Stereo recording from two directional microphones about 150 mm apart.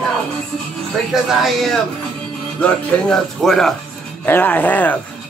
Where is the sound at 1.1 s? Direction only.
Centre (ahead or behind).